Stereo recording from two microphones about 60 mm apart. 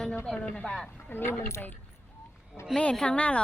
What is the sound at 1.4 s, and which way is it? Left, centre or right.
Speech, left.